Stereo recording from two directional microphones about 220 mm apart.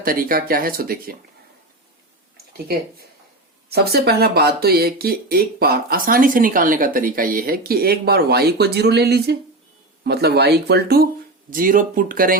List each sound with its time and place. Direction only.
0.0 s speech: 40° right (ahead or behind)
3.7 s speech: 45° right (ahead or behind)